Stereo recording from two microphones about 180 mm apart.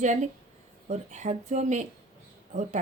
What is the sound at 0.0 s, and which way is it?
A woman's voice, 40° right (ahead or behind).